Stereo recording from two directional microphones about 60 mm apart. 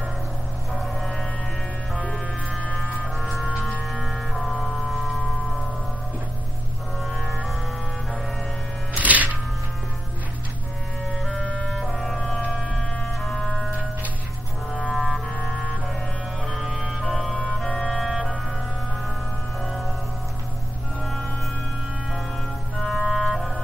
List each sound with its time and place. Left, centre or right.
0.7 s music: centre
2.5 s music: centre
3.2 s music: centre
3.4 s music: centre
3.9 s music: centre
7.1 s music: centre
8.9 s music: right
11.1 s music: centre
14.7 s music: centre
15.4 s music: centre
16.4 s music: centre
21.0 s music: centre
22.8 s clarinet: centre